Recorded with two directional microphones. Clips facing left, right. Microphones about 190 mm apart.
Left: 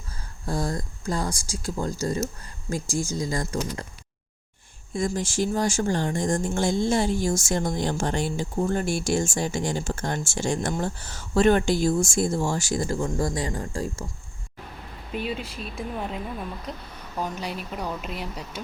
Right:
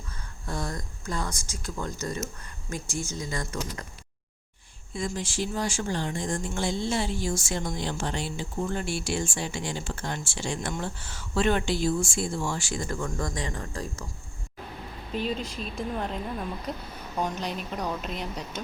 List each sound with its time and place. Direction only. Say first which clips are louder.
0.4 s speech: left 6 dB; 35° left (ahead or behind)
4.9 s speech: left 5 dB; 45° left (ahead or behind); by 14.0 s 30° left (ahead or behind)
15.1 s a woman's voice: even; 5° left (ahead or behind)